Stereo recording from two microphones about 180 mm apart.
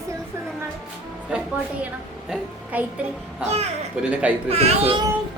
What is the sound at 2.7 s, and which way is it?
Speech, 10° right (ahead or behind).